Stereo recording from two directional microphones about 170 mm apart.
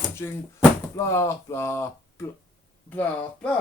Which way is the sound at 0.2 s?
15° left (ahead or behind).